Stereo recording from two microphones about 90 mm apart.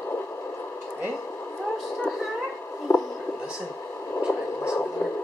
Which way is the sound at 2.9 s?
30° left (ahead or behind).